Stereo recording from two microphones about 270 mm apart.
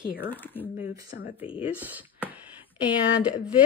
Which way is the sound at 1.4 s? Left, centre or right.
Centre.